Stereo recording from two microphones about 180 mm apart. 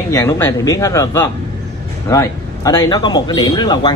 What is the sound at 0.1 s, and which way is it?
A man's voice, 15° left (ahead or behind).